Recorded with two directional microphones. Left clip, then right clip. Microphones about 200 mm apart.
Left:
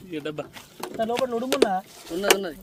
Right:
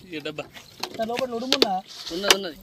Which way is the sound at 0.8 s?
50° left (ahead or behind).